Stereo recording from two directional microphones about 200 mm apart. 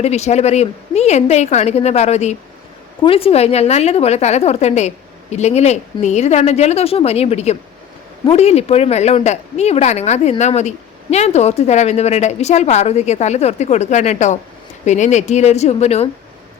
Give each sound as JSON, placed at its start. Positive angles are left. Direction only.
{"t": 0.0, "sound": "a woman's voice", "side_deg": 35}